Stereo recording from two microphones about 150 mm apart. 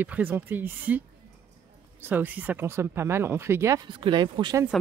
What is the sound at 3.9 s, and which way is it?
Speech, 30° right (ahead or behind).